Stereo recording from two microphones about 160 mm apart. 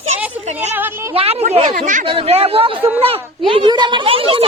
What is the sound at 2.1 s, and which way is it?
Speech, 40° right (ahead or behind).